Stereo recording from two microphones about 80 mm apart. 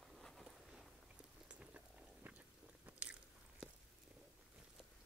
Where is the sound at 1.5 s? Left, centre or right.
Centre.